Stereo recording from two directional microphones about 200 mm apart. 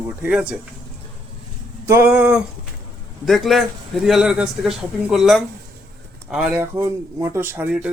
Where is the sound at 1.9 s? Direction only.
10° right (ahead or behind).